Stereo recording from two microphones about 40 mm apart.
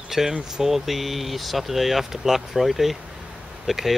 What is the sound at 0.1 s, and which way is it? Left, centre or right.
Speech, centre.